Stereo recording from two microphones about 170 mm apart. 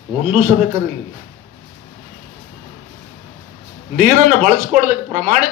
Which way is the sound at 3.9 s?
50° right (ahead or behind).